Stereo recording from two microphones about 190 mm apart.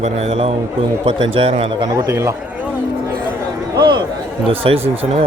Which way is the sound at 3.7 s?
20° right (ahead or behind).